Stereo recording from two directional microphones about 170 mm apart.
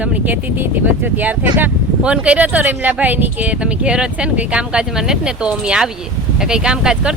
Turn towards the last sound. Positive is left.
turn(degrees=-5)  # may be behind; listen again after turning